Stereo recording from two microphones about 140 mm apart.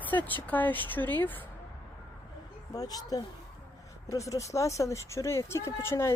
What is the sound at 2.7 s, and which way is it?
Speech, 25° left (ahead or behind).